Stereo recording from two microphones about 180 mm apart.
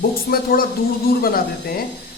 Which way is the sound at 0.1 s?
55° left (ahead or behind).